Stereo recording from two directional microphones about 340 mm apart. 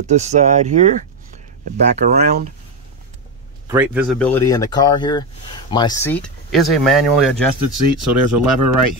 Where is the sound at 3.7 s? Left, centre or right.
Centre.